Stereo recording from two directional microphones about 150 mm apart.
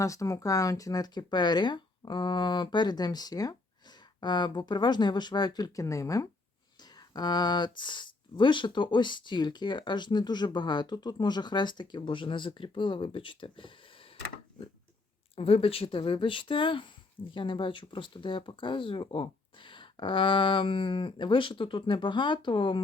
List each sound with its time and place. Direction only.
0.0 s speech: 20° left (ahead or behind)
15.4 s speech: 40° left (ahead or behind)